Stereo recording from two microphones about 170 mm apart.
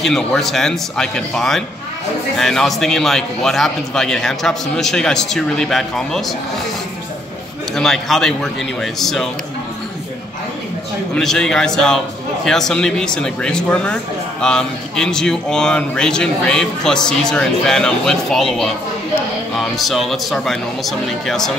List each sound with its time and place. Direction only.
0.0 s speech: centre (ahead or behind)
7.7 s speech: centre (ahead or behind)
11.1 s speech: 5° left (ahead or behind)